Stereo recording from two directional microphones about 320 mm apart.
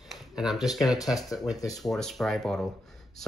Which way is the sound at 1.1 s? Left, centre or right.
Centre.